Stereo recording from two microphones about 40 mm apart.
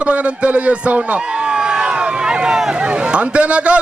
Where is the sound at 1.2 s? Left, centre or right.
Right.